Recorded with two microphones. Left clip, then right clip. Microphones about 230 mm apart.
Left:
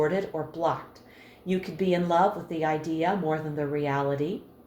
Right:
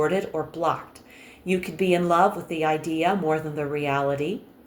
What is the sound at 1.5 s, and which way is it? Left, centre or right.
Speech, right.